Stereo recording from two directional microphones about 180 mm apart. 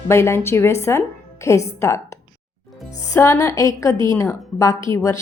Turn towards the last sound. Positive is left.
turn(degrees=15)  # may be behind; listen again after turning